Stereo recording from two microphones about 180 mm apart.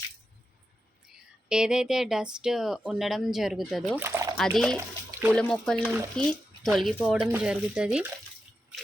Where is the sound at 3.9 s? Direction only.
15° right (ahead or behind).